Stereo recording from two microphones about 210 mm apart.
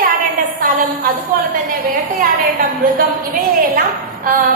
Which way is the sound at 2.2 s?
45° right (ahead or behind).